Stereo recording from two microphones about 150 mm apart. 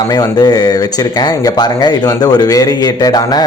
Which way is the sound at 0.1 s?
25° left (ahead or behind).